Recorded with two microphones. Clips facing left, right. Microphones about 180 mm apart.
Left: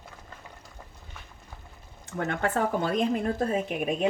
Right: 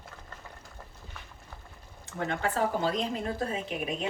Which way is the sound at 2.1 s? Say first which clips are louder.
Left 2 dB; 55° left (ahead or behind).